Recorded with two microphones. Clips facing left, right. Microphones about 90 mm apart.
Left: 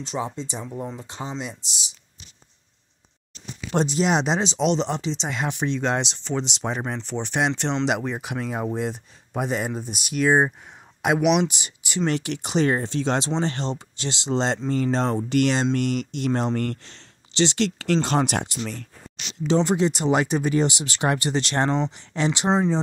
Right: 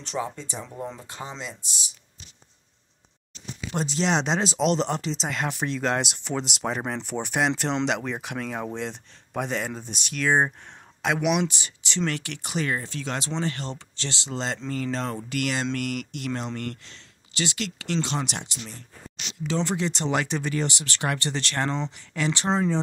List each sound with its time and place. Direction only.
0.1 s speech: 20° left (ahead or behind)
0.7 s speech: 5° left (ahead or behind)
0.9 s speech: 20° left (ahead or behind)
3.8 s speech: 15° left (ahead or behind); by 17.6 s 30° left (ahead or behind)
17.6 s speech: 40° left (ahead or behind)
19.4 s speech: 20° left (ahead or behind)